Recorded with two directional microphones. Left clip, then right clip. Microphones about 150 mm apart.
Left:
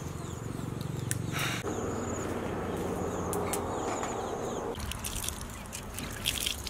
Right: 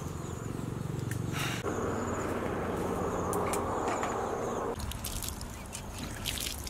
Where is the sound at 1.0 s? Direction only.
Centre (ahead or behind).